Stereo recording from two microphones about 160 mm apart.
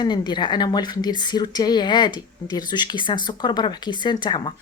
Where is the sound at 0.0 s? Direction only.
30° left (ahead or behind).